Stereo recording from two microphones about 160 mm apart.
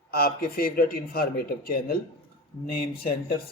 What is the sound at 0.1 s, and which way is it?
A man's voice, 70° left (ahead or behind).